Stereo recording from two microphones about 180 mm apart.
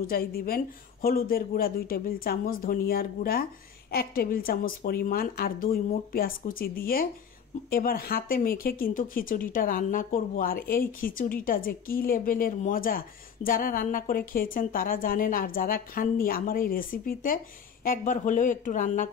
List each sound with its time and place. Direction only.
0.0 s a woman's voice: 55° left (ahead or behind)